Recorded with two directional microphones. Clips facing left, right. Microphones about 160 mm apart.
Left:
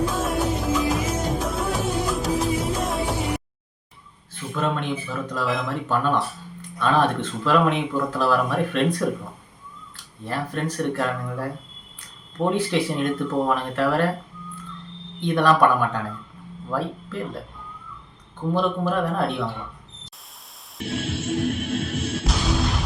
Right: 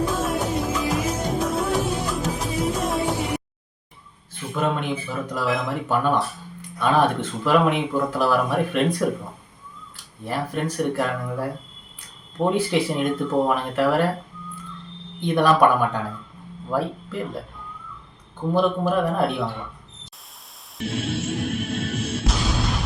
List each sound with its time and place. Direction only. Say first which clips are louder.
0.1 s music: even; centre (ahead or behind)
4.5 s speech: right 1 dB; 10° right (ahead or behind)
10.2 s speech: right 1 dB; 10° right (ahead or behind)
15.2 s speech: right 1 dB; 10° right (ahead or behind)
18.5 s speech: right 3 dB; 10° right (ahead or behind)
20.7 s music: right 1 dB; centre (ahead or behind)